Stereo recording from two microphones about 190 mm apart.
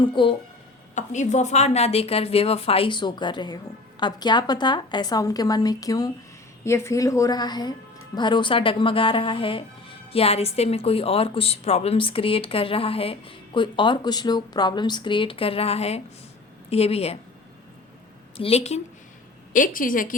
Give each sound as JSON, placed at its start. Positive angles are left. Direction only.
{"t": 0.1, "sound": "a woman's voice", "side_deg": 25}
{"t": 0.9, "sound": "a woman's voice", "side_deg": 40}
{"t": 18.3, "sound": "a woman's voice", "side_deg": 30}
{"t": 19.5, "sound": "a woman's voice", "side_deg": 45}